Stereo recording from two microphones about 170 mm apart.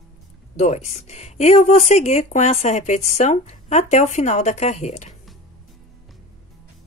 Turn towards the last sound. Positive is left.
turn(degrees=40)  # may be behind; listen again after turning